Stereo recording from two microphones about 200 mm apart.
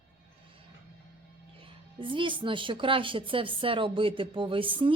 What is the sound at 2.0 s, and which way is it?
A woman's voice, 25° right (ahead or behind).